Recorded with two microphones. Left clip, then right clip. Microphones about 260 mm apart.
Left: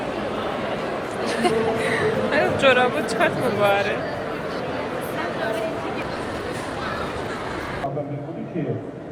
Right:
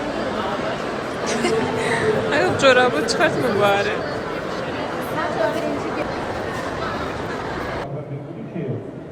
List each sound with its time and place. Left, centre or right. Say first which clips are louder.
1.3 s speech: even; centre